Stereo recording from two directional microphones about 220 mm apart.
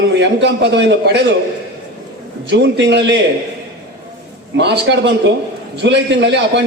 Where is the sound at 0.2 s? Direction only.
50° right (ahead or behind).